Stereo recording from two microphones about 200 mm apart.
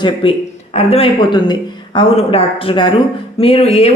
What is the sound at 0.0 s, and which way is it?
A woman's voice, 25° left (ahead or behind).